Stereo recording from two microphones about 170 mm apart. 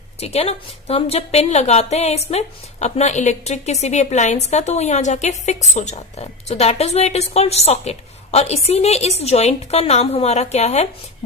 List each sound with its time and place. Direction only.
0.2 s a woman's voice: 35° left (ahead or behind)